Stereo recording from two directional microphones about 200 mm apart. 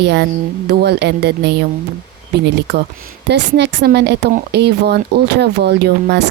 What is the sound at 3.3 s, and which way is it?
Speech, 60° right (ahead or behind).